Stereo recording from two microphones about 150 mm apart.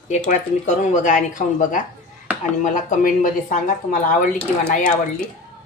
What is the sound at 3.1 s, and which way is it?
Speech, 65° left (ahead or behind).